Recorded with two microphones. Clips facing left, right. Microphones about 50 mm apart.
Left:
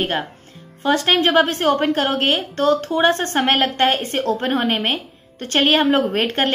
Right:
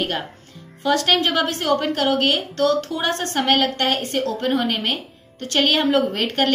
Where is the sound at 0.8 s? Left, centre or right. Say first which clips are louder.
Left 2 dB; left.